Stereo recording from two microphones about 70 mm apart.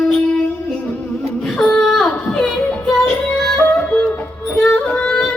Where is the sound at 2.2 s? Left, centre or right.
Centre.